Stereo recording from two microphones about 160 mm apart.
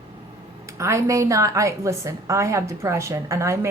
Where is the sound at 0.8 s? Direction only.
20° right (ahead or behind).